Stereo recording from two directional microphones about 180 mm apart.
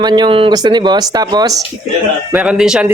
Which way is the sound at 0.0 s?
25° right (ahead or behind).